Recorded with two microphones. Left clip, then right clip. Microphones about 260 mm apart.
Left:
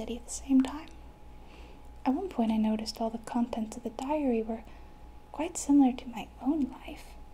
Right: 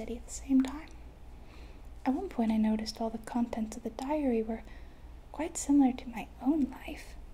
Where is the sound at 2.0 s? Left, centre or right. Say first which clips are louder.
Left 2 dB; centre.